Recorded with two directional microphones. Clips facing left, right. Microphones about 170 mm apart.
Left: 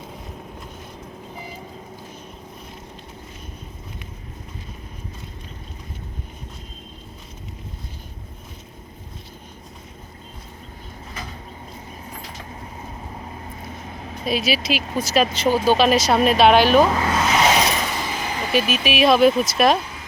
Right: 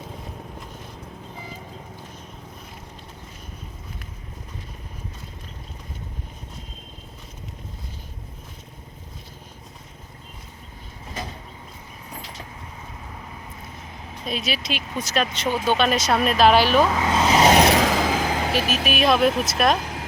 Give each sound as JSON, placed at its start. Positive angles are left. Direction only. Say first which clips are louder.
{"t": 14.3, "sound": "speech", "louder": "left 6 dB", "side_deg": 5}
{"t": 15.4, "sound": "speech", "louder": "left 5 dB", "side_deg": 30}
{"t": 15.8, "sound": "speech", "louder": "left 4 dB", "side_deg": 0}
{"t": 17.1, "sound": "vehicle", "louder": "right 1 dB", "side_deg": -25}
{"t": 17.5, "sound": "a sound", "louder": "right 4 dB", "side_deg": -65}
{"t": 18.9, "sound": "speech", "louder": "left 4 dB", "side_deg": 0}
{"t": 19.8, "sound": "a sound", "louder": "right 4 dB", "side_deg": -80}